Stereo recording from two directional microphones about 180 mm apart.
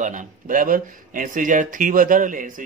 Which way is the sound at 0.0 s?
45° right (ahead or behind).